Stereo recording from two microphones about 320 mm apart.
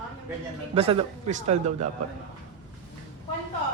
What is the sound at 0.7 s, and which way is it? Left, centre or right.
Speech, centre.